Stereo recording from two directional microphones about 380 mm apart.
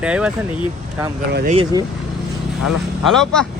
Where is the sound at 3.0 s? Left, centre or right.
Centre.